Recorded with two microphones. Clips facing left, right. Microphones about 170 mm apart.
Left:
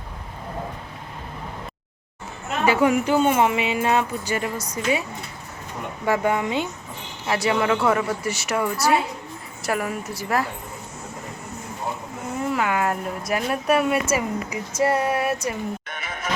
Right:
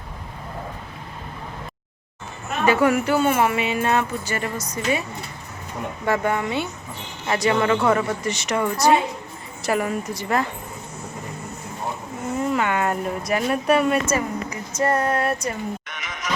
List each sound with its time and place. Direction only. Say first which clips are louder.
2.6 s speech: right 1 dB; 15° left (ahead or behind)
6.1 s a woman's voice: left 1 dB; 15° left (ahead or behind)
12.5 s a woman's voice: right 1 dB; 5° left (ahead or behind)
15.9 s music: left 1 dB; 35° left (ahead or behind)